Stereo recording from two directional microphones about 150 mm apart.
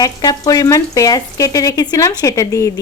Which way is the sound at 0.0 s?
25° left (ahead or behind).